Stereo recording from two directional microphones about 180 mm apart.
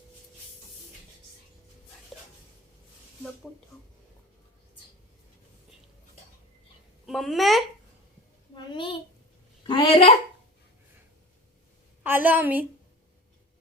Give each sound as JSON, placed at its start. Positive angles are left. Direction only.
{"t": 2.1, "sound": "dog", "side_deg": 0}
{"t": 7.0, "sound": "a child's voice", "side_deg": 0}
{"t": 8.5, "sound": "a sound", "side_deg": 25}
{"t": 12.0, "sound": "a woman's voice", "side_deg": -10}